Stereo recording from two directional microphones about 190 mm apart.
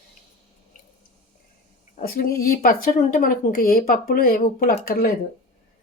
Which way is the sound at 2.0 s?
50° left (ahead or behind).